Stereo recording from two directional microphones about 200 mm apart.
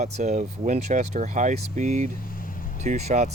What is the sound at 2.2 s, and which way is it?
Vehicle, 45° left (ahead or behind).